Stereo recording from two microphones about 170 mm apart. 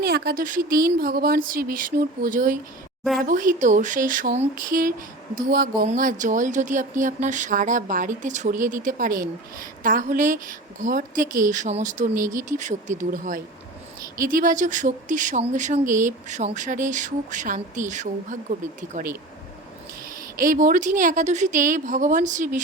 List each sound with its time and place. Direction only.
0.0 s speech: 65° right (ahead or behind); by 19.1 s 50° right (ahead or behind)
20.4 s speech: 55° right (ahead or behind)